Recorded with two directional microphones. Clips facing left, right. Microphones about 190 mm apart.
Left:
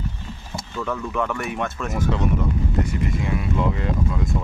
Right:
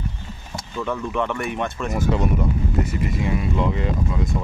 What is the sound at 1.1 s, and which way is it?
Speech, centre (ahead or behind).